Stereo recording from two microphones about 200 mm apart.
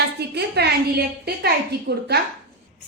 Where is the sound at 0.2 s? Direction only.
55° right (ahead or behind).